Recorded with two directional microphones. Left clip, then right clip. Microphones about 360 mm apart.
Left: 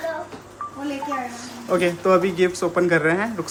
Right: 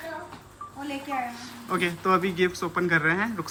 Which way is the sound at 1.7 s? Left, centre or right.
Centre.